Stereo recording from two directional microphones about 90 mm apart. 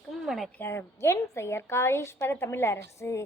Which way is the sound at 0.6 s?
25° left (ahead or behind).